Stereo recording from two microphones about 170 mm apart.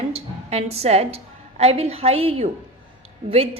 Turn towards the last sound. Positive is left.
turn(degrees=-35)  # may be behind; listen again after turning